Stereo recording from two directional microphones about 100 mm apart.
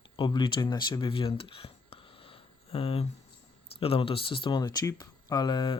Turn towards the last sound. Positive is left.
turn(degrees=50)  # may be behind; listen again after turning